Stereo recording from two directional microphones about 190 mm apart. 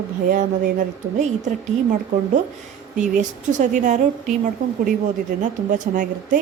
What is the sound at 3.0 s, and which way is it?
Speech, 40° right (ahead or behind).